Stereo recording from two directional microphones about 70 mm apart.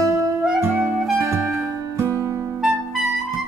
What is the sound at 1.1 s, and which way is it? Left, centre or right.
Music, right.